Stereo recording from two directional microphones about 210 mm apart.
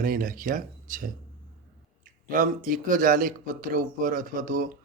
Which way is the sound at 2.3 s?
40° right (ahead or behind).